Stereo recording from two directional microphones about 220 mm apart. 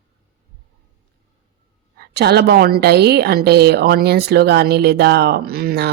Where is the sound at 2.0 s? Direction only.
45° right (ahead or behind).